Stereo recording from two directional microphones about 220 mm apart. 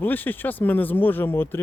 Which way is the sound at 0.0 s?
10° left (ahead or behind).